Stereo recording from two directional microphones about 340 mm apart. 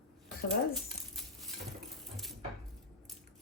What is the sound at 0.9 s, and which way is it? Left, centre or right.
Coin, centre.